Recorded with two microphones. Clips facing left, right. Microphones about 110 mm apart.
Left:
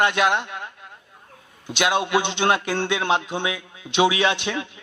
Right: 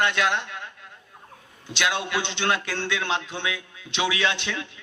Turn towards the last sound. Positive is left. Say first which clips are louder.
# left 5 dB
turn(degrees=20)  # may be behind; listen again after turning